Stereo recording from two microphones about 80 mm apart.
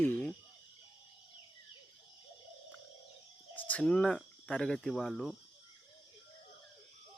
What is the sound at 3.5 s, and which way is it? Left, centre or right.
Speech, left.